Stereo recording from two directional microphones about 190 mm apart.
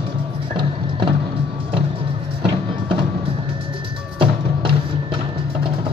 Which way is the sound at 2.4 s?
25° right (ahead or behind).